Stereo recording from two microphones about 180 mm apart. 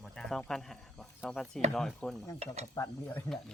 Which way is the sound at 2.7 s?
15° left (ahead or behind).